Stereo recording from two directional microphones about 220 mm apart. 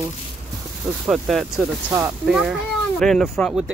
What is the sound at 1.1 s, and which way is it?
Speech, centre (ahead or behind).